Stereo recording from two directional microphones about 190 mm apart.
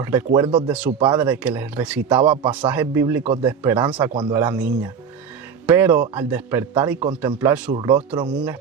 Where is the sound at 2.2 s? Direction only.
25° right (ahead or behind).